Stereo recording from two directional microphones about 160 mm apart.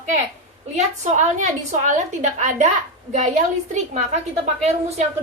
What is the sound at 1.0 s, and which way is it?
A woman's voice, 45° right (ahead or behind).